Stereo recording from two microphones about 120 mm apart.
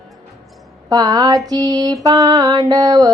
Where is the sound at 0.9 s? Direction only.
35° right (ahead or behind).